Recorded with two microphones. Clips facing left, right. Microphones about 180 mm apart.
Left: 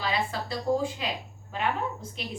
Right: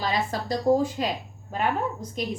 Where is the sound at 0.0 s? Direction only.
40° right (ahead or behind).